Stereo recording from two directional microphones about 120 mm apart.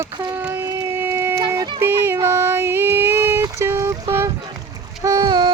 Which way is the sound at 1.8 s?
20° right (ahead or behind).